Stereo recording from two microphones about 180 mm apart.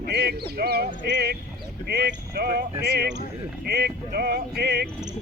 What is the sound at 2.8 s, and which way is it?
Speech, 70° right (ahead or behind).